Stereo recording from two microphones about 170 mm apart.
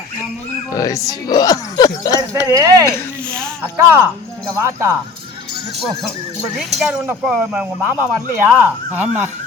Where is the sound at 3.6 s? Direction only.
10° right (ahead or behind).